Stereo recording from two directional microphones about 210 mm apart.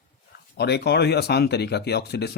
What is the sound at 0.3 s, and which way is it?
Speech, 50° left (ahead or behind).